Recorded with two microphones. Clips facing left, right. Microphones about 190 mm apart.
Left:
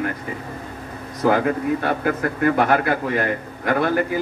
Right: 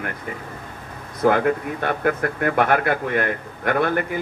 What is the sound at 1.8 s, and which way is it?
A man's voice, 55° right (ahead or behind).